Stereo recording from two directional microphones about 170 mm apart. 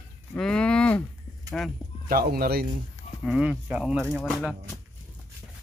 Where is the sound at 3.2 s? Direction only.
5° right (ahead or behind).